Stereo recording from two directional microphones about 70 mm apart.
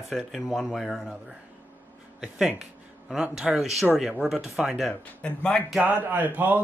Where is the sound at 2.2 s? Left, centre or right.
Centre.